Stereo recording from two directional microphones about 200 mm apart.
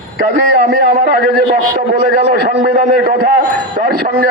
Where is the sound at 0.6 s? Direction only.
50° right (ahead or behind).